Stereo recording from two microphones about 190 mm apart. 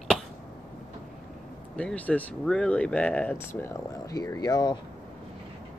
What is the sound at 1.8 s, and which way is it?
Speech, 5° left (ahead or behind).